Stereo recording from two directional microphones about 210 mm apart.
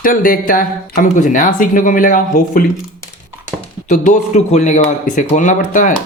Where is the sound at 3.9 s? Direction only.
40° left (ahead or behind).